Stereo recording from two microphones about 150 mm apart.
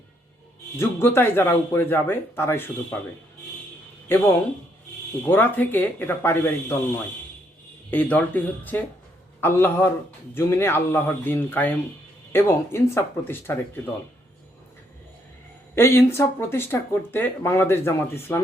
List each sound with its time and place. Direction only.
0.8 s speech: 15° left (ahead or behind)
5.2 s speech: 15° left (ahead or behind)
15.7 s speech: 15° left (ahead or behind)